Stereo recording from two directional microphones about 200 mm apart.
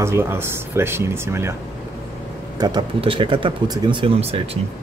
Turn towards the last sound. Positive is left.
turn(degrees=-30)  # may be behind; listen again after turning